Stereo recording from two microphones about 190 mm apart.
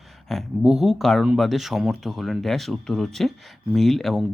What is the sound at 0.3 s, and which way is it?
Speech, centre (ahead or behind).